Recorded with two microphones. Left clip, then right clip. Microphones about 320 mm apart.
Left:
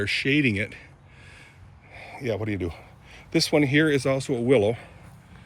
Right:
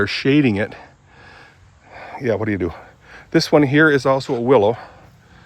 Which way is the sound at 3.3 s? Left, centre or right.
Centre.